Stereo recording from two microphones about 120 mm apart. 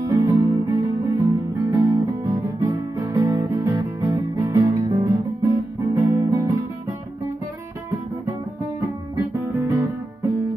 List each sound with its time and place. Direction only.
0.0 s music: 30° right (ahead or behind)
9.1 s guitar: 25° right (ahead or behind)